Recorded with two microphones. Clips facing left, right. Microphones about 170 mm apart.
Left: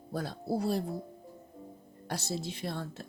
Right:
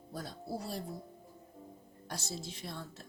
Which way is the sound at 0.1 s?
65° left (ahead or behind).